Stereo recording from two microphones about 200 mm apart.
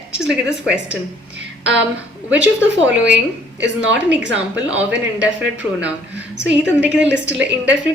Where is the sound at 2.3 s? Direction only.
10° right (ahead or behind).